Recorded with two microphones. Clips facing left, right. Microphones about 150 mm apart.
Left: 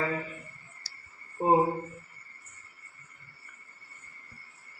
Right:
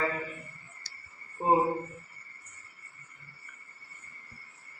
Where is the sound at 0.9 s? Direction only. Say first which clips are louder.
Right 1 dB; 5° left (ahead or behind).